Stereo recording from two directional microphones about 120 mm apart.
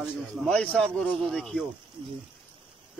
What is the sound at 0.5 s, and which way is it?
A man's voice, 5° left (ahead or behind).